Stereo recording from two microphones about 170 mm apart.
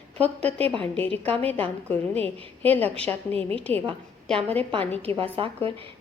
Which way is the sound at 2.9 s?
35° right (ahead or behind).